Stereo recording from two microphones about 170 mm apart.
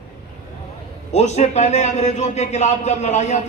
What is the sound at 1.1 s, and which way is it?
A man's voice, 40° left (ahead or behind).